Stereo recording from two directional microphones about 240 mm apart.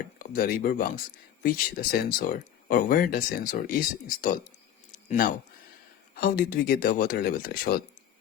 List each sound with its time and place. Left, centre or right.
0.0 s speech: left